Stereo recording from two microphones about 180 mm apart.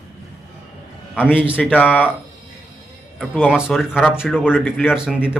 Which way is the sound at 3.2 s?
10° left (ahead or behind).